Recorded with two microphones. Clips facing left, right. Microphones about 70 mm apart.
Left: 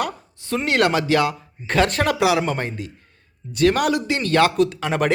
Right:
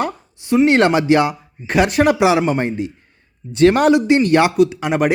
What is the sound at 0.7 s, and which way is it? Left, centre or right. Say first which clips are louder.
A man's voice: right 1 dB; right.